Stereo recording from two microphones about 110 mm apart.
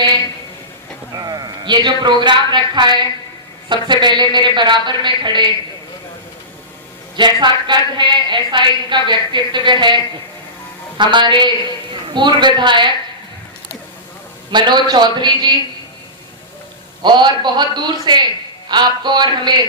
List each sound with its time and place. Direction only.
1.1 s a woman's voice: 35° right (ahead or behind)
7.2 s a woman's voice: 40° right (ahead or behind)
14.5 s a man's voice: 40° right (ahead or behind)
17.0 s a man's voice: 40° right (ahead or behind)